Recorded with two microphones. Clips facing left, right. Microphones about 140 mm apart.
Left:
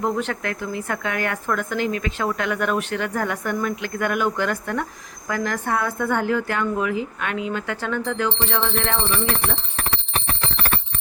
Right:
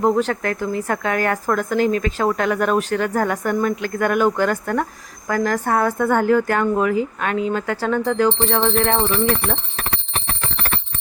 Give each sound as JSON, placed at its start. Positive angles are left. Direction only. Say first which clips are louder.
{"t": 0.0, "sound": "a woman's voice", "louder": "right 6 dB", "side_deg": -40}